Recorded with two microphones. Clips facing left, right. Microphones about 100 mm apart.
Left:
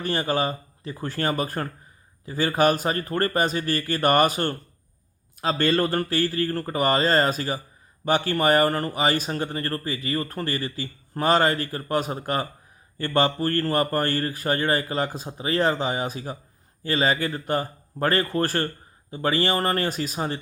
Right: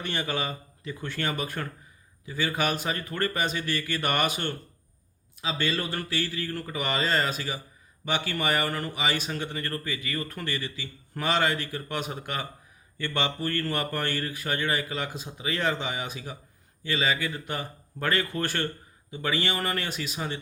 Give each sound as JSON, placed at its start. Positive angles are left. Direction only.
{"t": 0.0, "sound": "speech", "side_deg": 35}